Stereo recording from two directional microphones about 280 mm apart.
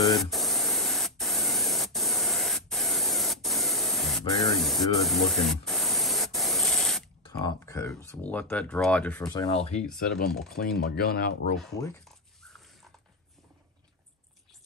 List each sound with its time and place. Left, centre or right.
0.1 s spray: centre
7.2 s speech: centre
9.4 s speech: left
9.9 s speech: left
12.0 s a sound: centre